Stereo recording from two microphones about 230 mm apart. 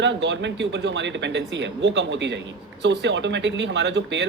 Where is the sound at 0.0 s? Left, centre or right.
Right.